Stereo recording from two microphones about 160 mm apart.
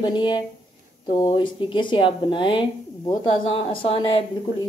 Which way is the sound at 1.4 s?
30° left (ahead or behind).